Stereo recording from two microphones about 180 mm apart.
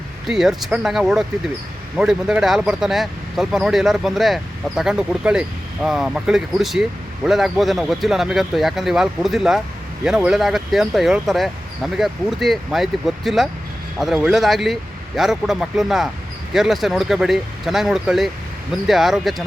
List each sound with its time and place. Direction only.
0.3 s speech: centre (ahead or behind)